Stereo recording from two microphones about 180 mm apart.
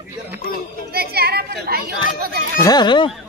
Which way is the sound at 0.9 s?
60° right (ahead or behind).